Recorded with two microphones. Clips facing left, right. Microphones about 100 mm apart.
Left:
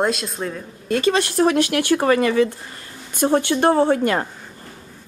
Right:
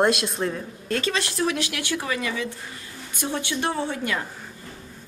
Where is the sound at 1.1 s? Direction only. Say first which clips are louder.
Left 8 dB; 45° left (ahead or behind).